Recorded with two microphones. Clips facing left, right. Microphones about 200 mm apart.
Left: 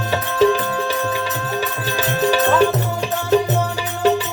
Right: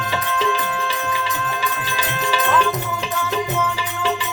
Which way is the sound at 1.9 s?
40° left (ahead or behind).